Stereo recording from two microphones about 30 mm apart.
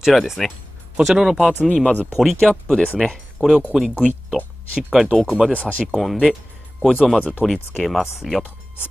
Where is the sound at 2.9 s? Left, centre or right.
Centre.